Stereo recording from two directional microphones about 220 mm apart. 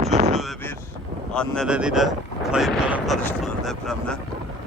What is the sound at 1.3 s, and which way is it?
Speech, 5° left (ahead or behind).